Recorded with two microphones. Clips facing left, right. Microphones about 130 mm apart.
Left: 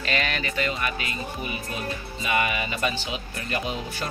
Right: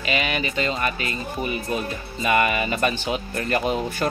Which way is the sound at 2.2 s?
50° right (ahead or behind).